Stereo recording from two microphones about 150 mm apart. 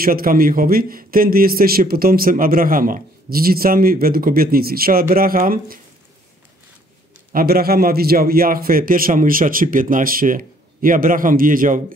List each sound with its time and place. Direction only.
0.0 s a man's voice: 75° right (ahead or behind)
7.3 s a man's voice: 90° right; by 11.8 s 65° right (ahead or behind)